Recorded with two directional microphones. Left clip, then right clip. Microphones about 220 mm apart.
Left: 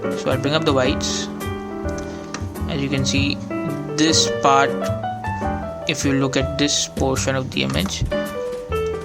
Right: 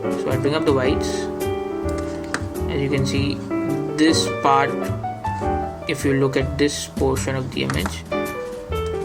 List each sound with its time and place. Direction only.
0.3 s speech: 50° left (ahead or behind)
2.7 s speech: 50° left (ahead or behind)
5.9 s speech: 50° left (ahead or behind)